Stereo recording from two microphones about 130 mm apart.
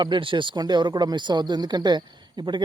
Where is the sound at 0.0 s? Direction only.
40° right (ahead or behind).